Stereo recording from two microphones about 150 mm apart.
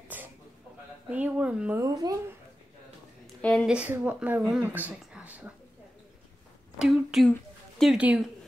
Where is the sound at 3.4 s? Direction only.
10° left (ahead or behind).